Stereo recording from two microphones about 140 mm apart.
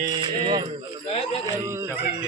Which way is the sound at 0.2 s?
30° right (ahead or behind).